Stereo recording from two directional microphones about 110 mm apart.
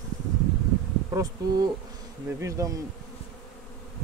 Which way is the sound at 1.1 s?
35° right (ahead or behind).